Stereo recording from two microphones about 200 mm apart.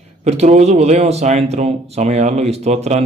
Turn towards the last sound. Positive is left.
turn(degrees=-35)  # may be behind; listen again after turning